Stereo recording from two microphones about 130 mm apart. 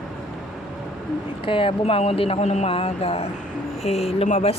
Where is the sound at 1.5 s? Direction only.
40° left (ahead or behind).